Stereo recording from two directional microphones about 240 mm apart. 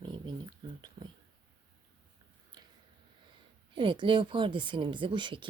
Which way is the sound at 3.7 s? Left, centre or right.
Centre.